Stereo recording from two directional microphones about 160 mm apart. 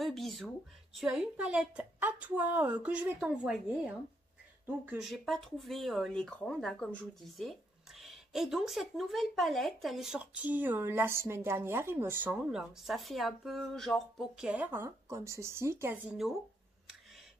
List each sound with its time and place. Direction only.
0.0 s a woman's voice: centre (ahead or behind); by 16.0 s 15° right (ahead or behind)